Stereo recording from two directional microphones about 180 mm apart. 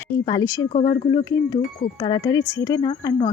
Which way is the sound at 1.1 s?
20° left (ahead or behind).